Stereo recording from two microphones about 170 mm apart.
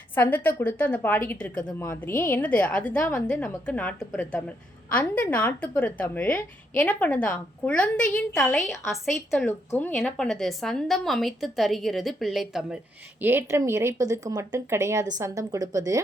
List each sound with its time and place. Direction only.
0.1 s a woman's voice: 10° left (ahead or behind)
9.7 s speech: 10° left (ahead or behind); by 16.0 s 20° right (ahead or behind)